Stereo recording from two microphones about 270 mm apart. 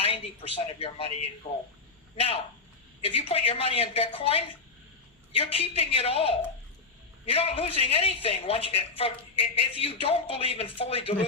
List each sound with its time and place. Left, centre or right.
0.0 s a woman's voice: left